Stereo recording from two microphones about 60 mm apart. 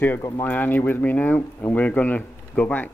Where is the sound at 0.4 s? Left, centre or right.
Left.